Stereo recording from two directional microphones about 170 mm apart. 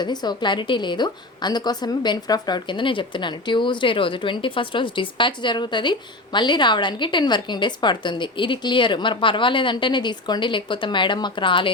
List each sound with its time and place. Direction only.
0.0 s a woman's voice: 25° left (ahead or behind)